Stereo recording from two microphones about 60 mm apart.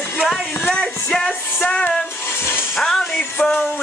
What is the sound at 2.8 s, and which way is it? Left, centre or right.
Music, centre.